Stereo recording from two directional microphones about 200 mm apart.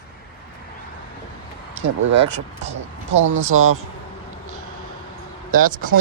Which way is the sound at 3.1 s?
75° right (ahead or behind).